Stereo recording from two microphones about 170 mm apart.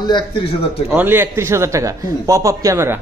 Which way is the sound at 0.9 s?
10° right (ahead or behind).